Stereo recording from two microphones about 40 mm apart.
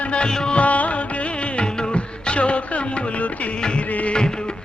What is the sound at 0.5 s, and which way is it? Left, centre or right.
Music, left.